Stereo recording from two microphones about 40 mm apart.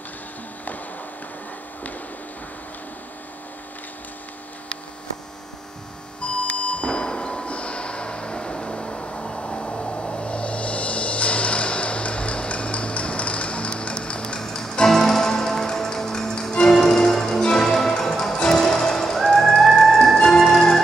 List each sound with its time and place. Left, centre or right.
6.4 s a sound: left
14.4 s music: centre
16.7 s music: centre